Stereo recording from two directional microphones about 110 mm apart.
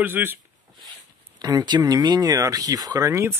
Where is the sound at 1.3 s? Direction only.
35° right (ahead or behind).